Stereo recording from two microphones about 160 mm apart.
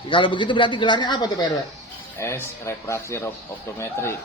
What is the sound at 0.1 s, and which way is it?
Speech, 30° left (ahead or behind).